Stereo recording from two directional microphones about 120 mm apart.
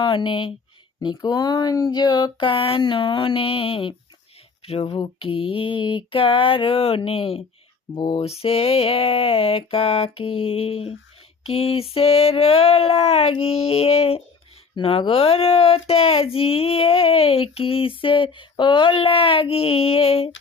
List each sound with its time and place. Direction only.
0.0 s speech: 45° left (ahead or behind)
8.4 s speech: 55° left (ahead or behind)
11.4 s a sound: 55° left (ahead or behind)
14.8 s speech: 45° left (ahead or behind)